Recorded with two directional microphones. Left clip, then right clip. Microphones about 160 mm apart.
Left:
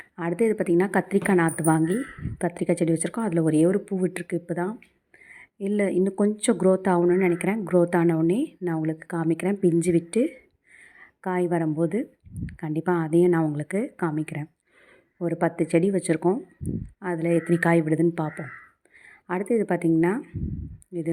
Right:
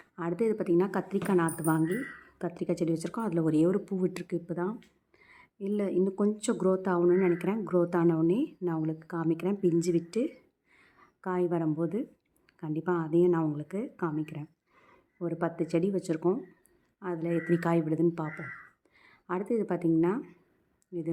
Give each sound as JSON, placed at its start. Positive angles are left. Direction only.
{"t": 0.2, "sound": "a woman's voice", "side_deg": 15}
{"t": 7.0, "sound": "a woman's voice", "side_deg": 10}